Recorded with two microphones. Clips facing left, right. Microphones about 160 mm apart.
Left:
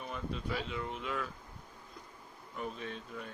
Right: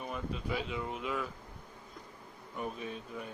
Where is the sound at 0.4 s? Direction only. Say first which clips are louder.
Right 2 dB; 15° right (ahead or behind).